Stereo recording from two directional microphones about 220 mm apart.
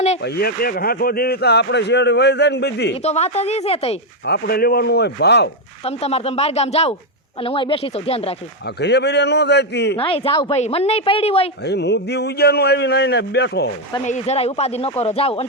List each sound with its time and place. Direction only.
0.2 s speech: 45° left (ahead or behind)
2.9 s speech: 30° left (ahead or behind)
4.3 s speech: 45° left (ahead or behind)
5.8 s speech: 30° left (ahead or behind)
8.6 s speech: 50° left (ahead or behind)
10.0 s speech: 25° left (ahead or behind)
11.6 s speech: 50° left (ahead or behind)
14.0 s speech: 30° left (ahead or behind)